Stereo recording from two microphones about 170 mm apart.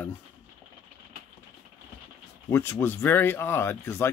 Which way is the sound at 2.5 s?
15° left (ahead or behind).